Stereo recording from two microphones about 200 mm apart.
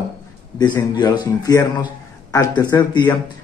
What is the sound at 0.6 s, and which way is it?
Speech, 20° left (ahead or behind).